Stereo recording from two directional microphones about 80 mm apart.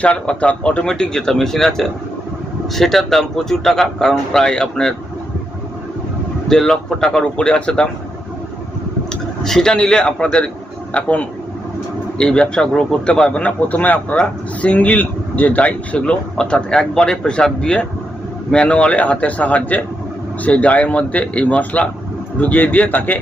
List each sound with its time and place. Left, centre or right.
0.0 s a man's voice: centre
6.5 s a man's voice: centre
9.4 s a man's voice: centre; by 23.2 s left